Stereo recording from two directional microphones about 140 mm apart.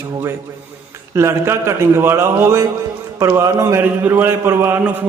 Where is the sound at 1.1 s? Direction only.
20° right (ahead or behind).